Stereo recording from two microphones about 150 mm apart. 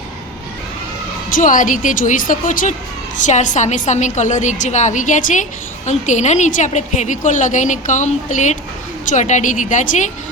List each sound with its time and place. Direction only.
1.3 s a woman's voice: 60° left (ahead or behind)